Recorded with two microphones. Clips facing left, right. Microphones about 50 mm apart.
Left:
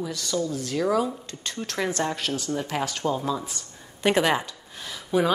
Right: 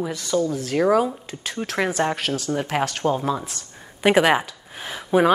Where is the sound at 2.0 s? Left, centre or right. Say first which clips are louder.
Right 6 dB; right.